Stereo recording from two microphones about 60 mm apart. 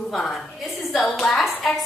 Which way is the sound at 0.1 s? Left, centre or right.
Centre.